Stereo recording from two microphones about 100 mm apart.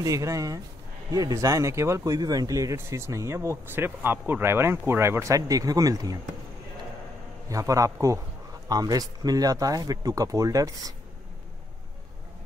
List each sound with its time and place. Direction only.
0.0 s speech: 35° right (ahead or behind)
2.1 s speech: 40° right (ahead or behind)
7.4 s speech: 35° right (ahead or behind)